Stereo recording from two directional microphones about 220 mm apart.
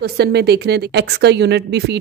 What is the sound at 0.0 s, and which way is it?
A woman's voice, 50° right (ahead or behind).